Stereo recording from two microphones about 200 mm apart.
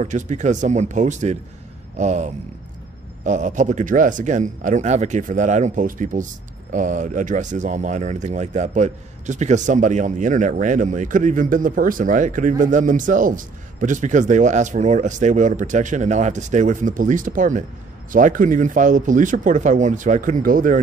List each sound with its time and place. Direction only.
0.0 s speech: 35° right (ahead or behind)